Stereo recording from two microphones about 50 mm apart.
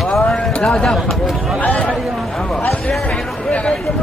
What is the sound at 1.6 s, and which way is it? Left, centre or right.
Speech, left.